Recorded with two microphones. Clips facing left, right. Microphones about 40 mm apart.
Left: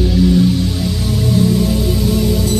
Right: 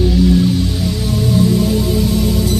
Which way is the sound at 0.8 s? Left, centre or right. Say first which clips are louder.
Even; centre.